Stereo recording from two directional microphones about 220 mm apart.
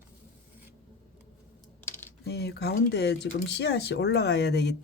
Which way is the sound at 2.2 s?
50° left (ahead or behind).